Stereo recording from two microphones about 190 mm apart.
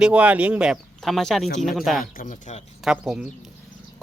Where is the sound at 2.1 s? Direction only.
40° left (ahead or behind).